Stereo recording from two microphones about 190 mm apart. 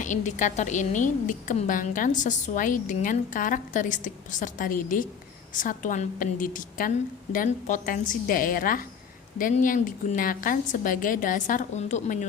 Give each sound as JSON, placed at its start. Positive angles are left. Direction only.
{"t": 0.0, "sound": "a woman's voice", "side_deg": 40}